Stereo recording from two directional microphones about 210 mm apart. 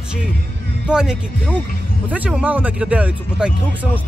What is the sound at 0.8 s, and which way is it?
Speech, 5° right (ahead or behind).